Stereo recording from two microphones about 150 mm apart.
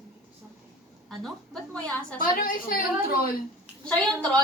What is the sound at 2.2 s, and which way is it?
Speech, 70° left (ahead or behind).